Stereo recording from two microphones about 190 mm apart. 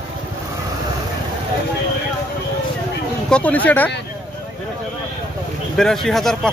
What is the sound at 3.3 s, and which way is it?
Speech, 5° left (ahead or behind).